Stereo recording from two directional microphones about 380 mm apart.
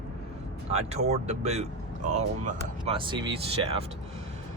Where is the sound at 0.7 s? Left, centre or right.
Centre.